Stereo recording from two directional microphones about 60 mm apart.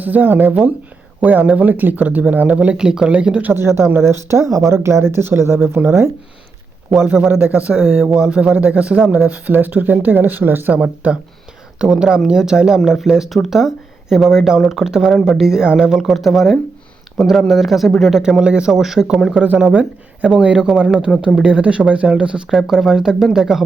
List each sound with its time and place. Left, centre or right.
0.0 s speech: right
3.5 s speech: right
5.8 s speech: right
6.9 s speech: centre
7.3 s speech: right
7.7 s speech: centre; by 10.8 s right
11.0 s speech: right
11.8 s speech: centre
19.3 s speech: right
19.8 s speech: centre
21.1 s speech: centre
21.4 s speech: right
22.4 s speech: centre